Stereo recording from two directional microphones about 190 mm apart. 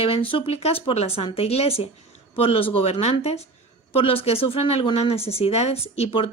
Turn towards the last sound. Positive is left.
turn(degrees=30)  # may be behind; listen again after turning